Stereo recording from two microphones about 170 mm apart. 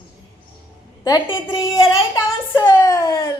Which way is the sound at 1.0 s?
20° left (ahead or behind).